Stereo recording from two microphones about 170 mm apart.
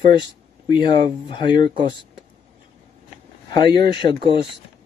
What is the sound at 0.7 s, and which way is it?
Speech, 25° left (ahead or behind).